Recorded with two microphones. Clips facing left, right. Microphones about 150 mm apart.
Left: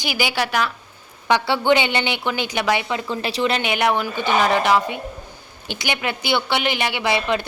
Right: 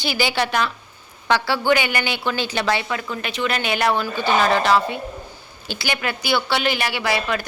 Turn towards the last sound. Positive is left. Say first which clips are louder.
# left 2 dB
turn(degrees=20)  # may be behind; listen again after turning